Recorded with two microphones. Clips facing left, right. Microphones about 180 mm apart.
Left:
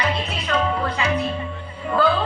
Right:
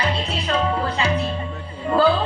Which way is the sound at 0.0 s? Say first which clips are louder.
Right 1 dB; 30° right (ahead or behind).